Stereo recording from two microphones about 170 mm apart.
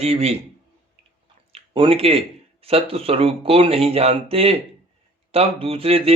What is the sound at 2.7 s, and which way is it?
A man's voice, 35° right (ahead or behind).